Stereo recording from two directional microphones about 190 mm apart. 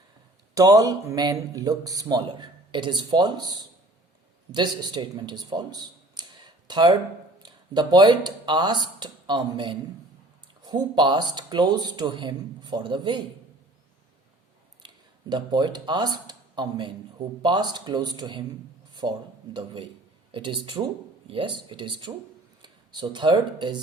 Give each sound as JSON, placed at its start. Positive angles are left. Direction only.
{"t": 0.5, "sound": "speech", "side_deg": -20}
{"t": 14.8, "sound": "speech", "side_deg": -25}